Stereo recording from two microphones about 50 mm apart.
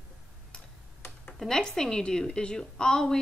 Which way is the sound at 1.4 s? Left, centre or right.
Centre.